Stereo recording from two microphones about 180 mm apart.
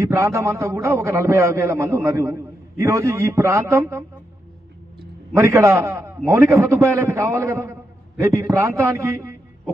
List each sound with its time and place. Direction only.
0.0 s a man's voice: 15° right (ahead or behind)
5.3 s a man's voice: 15° right (ahead or behind)